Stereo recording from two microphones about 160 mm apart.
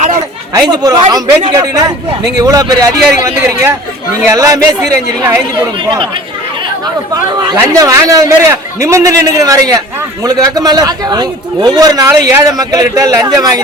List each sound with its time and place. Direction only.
0.5 s a man's voice: 25° right (ahead or behind)
7.6 s a man's voice: 20° right (ahead or behind)